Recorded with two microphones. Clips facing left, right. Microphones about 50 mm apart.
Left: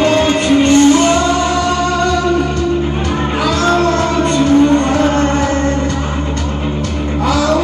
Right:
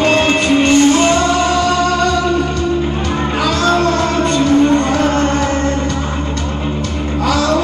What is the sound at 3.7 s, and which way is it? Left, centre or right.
Music, left.